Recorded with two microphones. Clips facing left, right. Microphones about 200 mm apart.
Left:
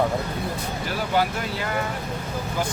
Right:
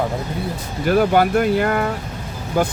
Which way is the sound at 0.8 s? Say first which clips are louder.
Right 10 dB; 55° right (ahead or behind).